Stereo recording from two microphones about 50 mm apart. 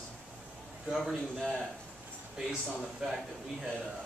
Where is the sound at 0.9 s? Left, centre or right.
Centre.